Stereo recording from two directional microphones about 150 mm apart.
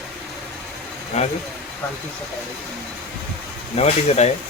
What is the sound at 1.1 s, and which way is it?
Speech, 45° left (ahead or behind).